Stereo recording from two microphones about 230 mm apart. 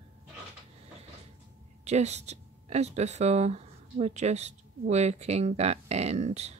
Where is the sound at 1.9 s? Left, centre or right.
Right.